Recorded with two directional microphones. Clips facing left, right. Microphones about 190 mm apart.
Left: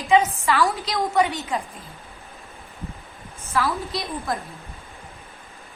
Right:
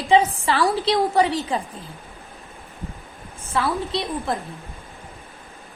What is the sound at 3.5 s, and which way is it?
Speech, 30° right (ahead or behind).